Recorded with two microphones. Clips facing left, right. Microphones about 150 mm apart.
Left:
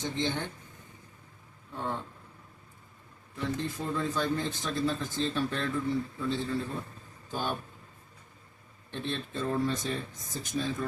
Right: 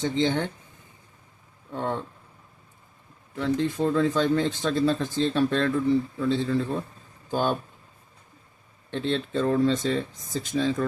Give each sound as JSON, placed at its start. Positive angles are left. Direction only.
{"t": 0.0, "sound": "speech", "side_deg": -75}
{"t": 1.7, "sound": "speech", "side_deg": -75}
{"t": 3.3, "sound": "speech", "side_deg": -80}
{"t": 8.9, "sound": "speech", "side_deg": -90}